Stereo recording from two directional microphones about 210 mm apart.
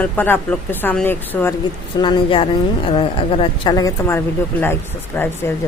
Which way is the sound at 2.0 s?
20° left (ahead or behind).